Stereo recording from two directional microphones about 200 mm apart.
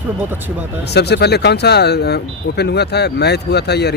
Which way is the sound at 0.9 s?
55° left (ahead or behind).